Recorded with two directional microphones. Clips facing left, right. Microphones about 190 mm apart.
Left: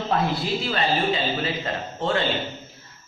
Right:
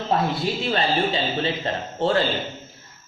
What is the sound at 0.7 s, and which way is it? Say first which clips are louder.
A man's voice: right 1 dB; 30° right (ahead or behind).